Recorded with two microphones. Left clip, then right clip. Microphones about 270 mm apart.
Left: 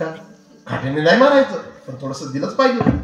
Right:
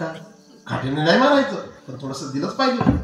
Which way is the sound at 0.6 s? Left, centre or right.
Left.